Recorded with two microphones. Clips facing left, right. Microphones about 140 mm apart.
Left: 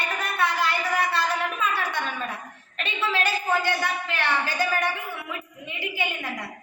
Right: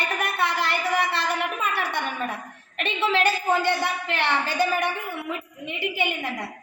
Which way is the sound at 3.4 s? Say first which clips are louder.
Right 2 dB; 25° right (ahead or behind).